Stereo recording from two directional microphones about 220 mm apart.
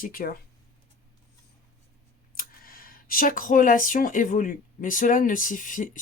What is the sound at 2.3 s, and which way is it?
Speech, 40° left (ahead or behind).